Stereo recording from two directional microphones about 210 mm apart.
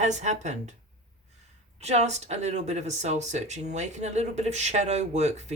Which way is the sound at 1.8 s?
30° right (ahead or behind).